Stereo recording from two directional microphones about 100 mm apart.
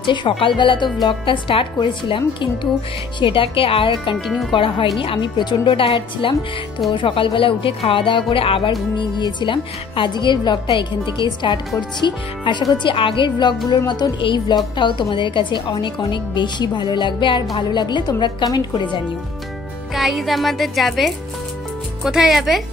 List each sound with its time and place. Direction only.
0.0 s a woman's voice: 55° left (ahead or behind)
4.3 s speech: centre (ahead or behind)
4.6 s speech: 55° left (ahead or behind)
8.9 s a woman's voice: 50° left (ahead or behind)
19.9 s speech: centre (ahead or behind)